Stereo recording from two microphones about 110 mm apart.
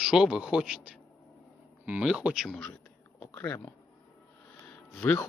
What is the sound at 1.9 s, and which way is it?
Speech, 10° right (ahead or behind).